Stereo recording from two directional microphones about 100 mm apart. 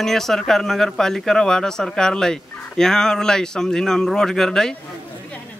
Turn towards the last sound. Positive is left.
turn(degrees=5)  # may be behind; listen again after turning